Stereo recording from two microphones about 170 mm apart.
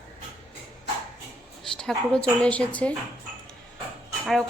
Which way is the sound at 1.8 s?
5° left (ahead or behind).